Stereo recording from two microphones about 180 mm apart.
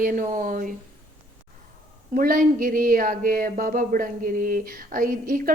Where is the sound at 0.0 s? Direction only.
50° right (ahead or behind).